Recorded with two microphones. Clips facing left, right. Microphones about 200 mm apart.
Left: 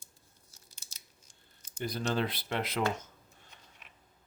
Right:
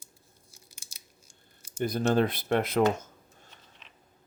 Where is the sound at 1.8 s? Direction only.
50° right (ahead or behind).